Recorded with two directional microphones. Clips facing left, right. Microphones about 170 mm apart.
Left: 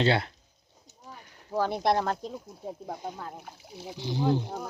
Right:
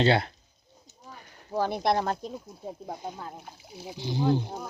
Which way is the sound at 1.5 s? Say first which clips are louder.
Even; 15° right (ahead or behind).